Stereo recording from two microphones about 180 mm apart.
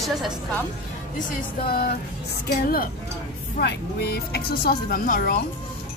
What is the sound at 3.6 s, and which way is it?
Speech, 65° left (ahead or behind).